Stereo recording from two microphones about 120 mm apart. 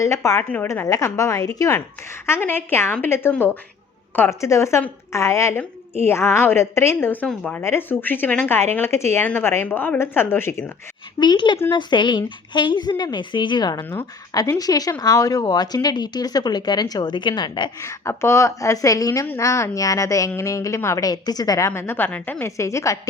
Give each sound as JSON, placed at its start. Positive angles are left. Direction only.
{"t": 0.0, "sound": "a woman's voice", "side_deg": 25}
{"t": 11.2, "sound": "speech", "side_deg": 40}
{"t": 17.7, "sound": "a woman's voice", "side_deg": 25}
{"t": 21.7, "sound": "a woman's voice", "side_deg": 20}